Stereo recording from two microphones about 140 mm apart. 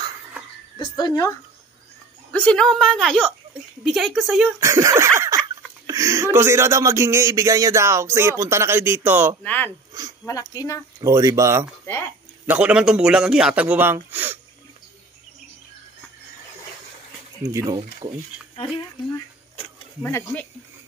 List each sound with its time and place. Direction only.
0.7 s speech: 30° left (ahead or behind)
2.3 s a woman's voice: 5° left (ahead or behind)
4.6 s speech: 20° right (ahead or behind)
9.4 s speech: 10° left (ahead or behind)
9.7 s speech: 25° right (ahead or behind)
10.5 s speech: 25° left (ahead or behind)
11.0 s speech: 25° right (ahead or behind)
12.4 s speech: 10° right (ahead or behind)
17.4 s speech: 20° right (ahead or behind)
18.6 s speech: 25° left (ahead or behind)
20.0 s speech: 15° left (ahead or behind)